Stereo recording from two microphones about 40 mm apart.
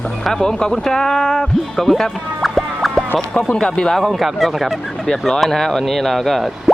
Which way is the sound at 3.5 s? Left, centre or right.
Left.